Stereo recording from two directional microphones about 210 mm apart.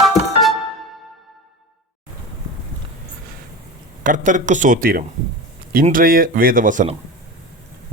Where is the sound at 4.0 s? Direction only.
40° right (ahead or behind).